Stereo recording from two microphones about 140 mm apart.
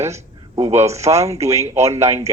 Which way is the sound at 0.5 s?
50° right (ahead or behind).